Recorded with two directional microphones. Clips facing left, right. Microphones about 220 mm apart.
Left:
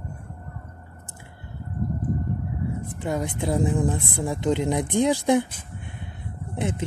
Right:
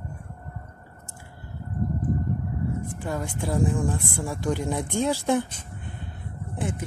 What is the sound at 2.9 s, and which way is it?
Speech, 20° left (ahead or behind).